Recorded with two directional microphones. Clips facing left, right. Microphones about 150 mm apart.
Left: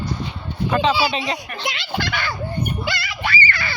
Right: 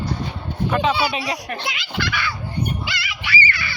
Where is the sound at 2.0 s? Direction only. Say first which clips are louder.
Right 2 dB; 45° left (ahead or behind).